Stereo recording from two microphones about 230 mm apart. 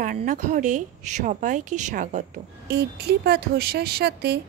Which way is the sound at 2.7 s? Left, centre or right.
Right.